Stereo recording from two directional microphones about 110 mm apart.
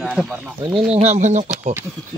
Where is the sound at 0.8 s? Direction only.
80° right.